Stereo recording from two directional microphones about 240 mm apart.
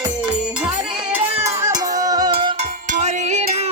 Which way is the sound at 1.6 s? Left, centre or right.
Centre.